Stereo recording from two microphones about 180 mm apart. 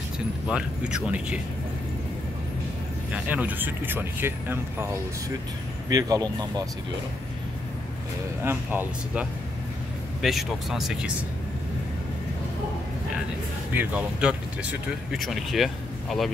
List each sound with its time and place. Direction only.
0.5 s speech: 5° right (ahead or behind)
3.1 s speech: 10° right (ahead or behind)
8.5 s speech: 10° right (ahead or behind)
13.7 s speech: 5° right (ahead or behind)